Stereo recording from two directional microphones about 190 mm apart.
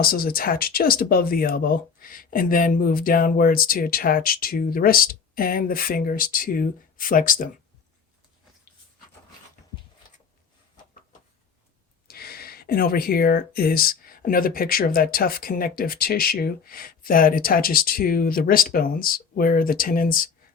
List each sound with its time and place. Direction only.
0.0 s speech: 50° left (ahead or behind)
12.0 s speech: 55° left (ahead or behind)